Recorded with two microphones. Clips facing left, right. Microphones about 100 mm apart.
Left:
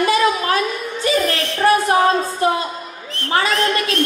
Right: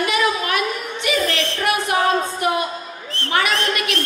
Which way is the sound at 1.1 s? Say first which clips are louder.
Left 2 dB; 30° left (ahead or behind).